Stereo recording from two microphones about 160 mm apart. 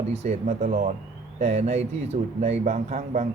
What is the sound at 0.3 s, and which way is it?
Speech, 50° right (ahead or behind).